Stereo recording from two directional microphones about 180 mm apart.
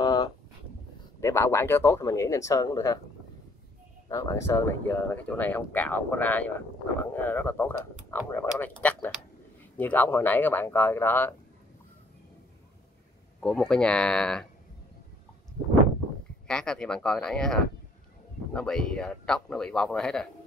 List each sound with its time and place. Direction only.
0.0 s a sound: 20° left (ahead or behind)
1.2 s speech: 15° left (ahead or behind)
4.1 s speech: 15° left (ahead or behind)
13.4 s speech: 5° left (ahead or behind)
16.4 s speech: 5° left (ahead or behind)